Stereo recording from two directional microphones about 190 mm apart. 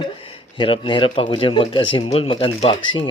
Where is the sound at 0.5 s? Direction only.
25° left (ahead or behind).